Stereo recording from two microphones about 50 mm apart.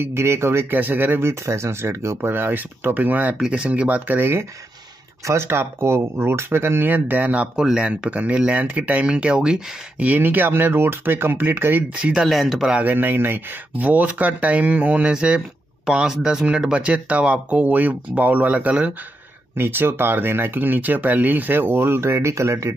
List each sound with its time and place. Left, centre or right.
0.0 s speech: right
0.7 s speech: right
1.4 s speech: right
3.3 s speech: centre
4.2 s speech: right
7.5 s speech: centre; by 9.0 s right
9.0 s speech: right
9.9 s speech: right
12.3 s speech: centre
12.8 s speech: right
13.7 s speech: right
16.1 s speech: centre
16.4 s speech: right
19.5 s speech: right